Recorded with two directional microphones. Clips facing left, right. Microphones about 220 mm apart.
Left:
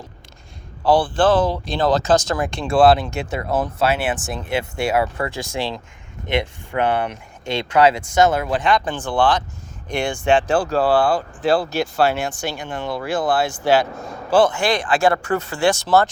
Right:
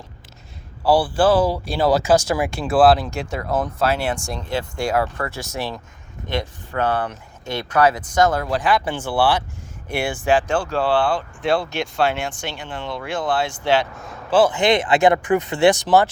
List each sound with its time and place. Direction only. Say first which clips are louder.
0.9 s speech: even; 10° right (ahead or behind); by 7.2 s 15° left (ahead or behind)
7.5 s speech: left 2 dB; 25° left (ahead or behind)
8.4 s speech: left 1 dB; centre (ahead or behind)
10.4 s speech: left 3 dB; 35° left (ahead or behind)
11.4 s speech: left 2 dB; centre (ahead or behind)
11.9 s speech: left 2 dB; 40° left (ahead or behind)
12.4 s speech: left 4 dB; 10° left (ahead or behind)
14.5 s speech: right 3 dB; 20° right (ahead or behind)